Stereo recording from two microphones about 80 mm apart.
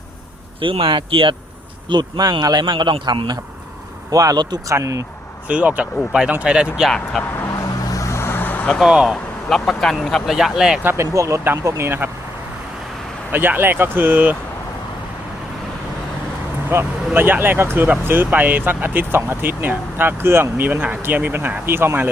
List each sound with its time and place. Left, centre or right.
0.6 s speech: right
1.9 s a man's voice: right
4.1 s speech: right
4.7 s speech: right
5.5 s speech: centre
6.9 s speech: centre
7.3 s vehicle: left; by 8.8 s centre
8.8 s speech: centre
9.0 s speech: centre
10.3 s speech: centre
10.8 s speech: right
13.3 s speech: right
16.7 s speech: right